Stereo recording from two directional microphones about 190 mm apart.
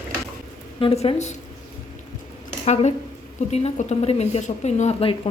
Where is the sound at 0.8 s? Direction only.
30° left (ahead or behind).